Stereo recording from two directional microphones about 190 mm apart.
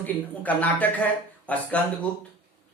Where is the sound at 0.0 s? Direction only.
10° left (ahead or behind).